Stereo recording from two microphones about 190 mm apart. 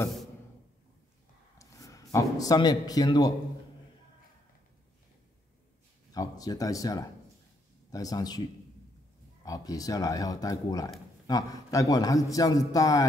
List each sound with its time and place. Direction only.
1.6 s a man's voice: 15° left (ahead or behind)
6.1 s a man's voice: 20° left (ahead or behind)
9.4 s a man's voice: 20° left (ahead or behind)